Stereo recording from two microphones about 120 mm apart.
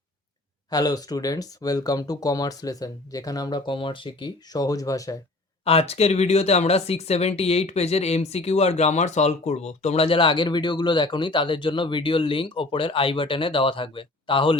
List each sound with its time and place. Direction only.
0.7 s speech: 35° left (ahead or behind)
3.7 s speech: 45° left (ahead or behind); by 5.1 s 30° left (ahead or behind)
5.6 s speech: 55° left (ahead or behind)